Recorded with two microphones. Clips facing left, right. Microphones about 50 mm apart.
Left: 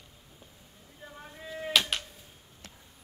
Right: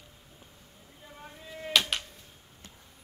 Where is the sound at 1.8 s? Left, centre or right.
Centre.